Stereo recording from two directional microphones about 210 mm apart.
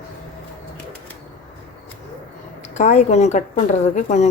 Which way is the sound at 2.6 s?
35° left (ahead or behind).